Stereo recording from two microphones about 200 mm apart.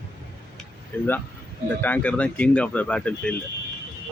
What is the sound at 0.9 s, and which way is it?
Speech, 10° left (ahead or behind).